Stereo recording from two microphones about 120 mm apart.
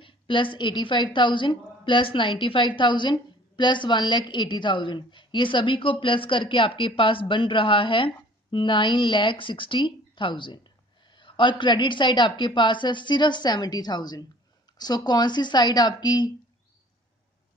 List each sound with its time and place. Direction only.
0.0 s a woman's voice: 45° left (ahead or behind)